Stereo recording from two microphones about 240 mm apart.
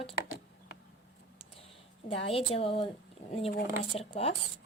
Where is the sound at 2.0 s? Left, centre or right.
Left.